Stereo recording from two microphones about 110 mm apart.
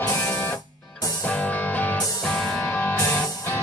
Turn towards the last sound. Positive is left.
turn(degrees=20)  # may be behind; listen again after turning